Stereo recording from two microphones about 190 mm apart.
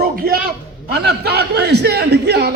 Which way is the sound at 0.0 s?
50° right (ahead or behind).